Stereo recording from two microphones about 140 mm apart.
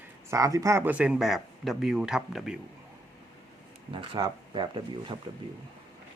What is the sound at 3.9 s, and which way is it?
Speech, 35° right (ahead or behind).